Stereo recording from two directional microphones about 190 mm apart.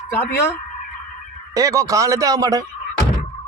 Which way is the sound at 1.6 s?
15° right (ahead or behind).